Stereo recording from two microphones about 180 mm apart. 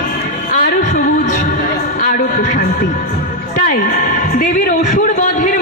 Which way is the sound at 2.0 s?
50° left (ahead or behind).